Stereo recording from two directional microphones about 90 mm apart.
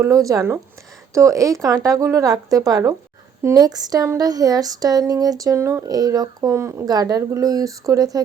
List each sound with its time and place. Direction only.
0.0 s speech: 40° right (ahead or behind)
5.9 s speech: 45° right (ahead or behind)
6.8 s speech: 45° right (ahead or behind)